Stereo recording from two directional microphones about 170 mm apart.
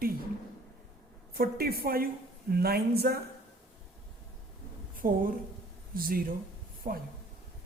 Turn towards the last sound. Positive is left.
turn(degrees=-50)  # may be behind; listen again after turning